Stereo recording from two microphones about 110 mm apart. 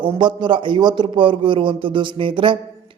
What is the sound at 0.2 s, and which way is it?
A man's voice, 45° right (ahead or behind).